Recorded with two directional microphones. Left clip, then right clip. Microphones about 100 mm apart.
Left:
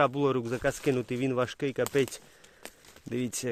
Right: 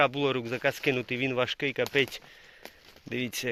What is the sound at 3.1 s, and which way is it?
Speech, 90° left.